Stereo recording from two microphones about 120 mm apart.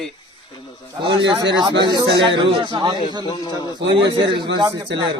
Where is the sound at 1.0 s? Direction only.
40° right (ahead or behind).